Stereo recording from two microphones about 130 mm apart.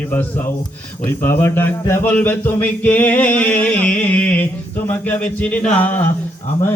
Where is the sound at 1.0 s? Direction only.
15° left (ahead or behind).